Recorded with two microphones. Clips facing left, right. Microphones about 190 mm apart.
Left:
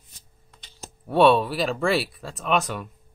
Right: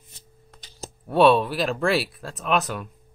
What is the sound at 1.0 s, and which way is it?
Speech, centre (ahead or behind).